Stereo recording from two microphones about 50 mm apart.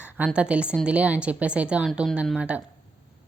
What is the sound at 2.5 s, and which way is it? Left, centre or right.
Speech, right.